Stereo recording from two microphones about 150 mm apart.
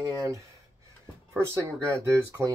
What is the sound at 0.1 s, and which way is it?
Speech, 20° right (ahead or behind).